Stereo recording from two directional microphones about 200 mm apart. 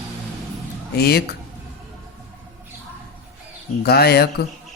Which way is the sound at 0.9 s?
50° left (ahead or behind).